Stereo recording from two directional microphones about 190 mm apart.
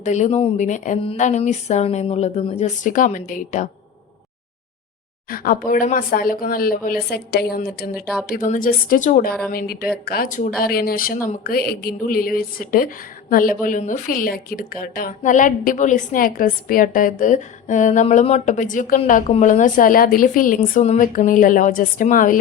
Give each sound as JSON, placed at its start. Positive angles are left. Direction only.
{"t": 0.0, "sound": "speech", "side_deg": 40}
{"t": 5.3, "sound": "a woman's voice", "side_deg": 50}